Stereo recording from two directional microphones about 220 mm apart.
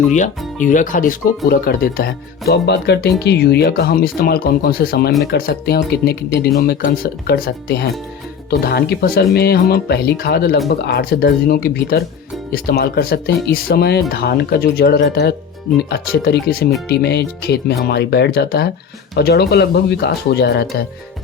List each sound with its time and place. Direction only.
0.2 s speech: 35° left (ahead or behind)